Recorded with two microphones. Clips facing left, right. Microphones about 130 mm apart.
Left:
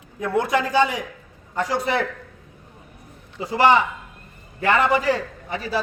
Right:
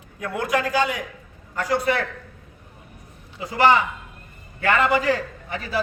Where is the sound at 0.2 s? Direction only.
25° left (ahead or behind).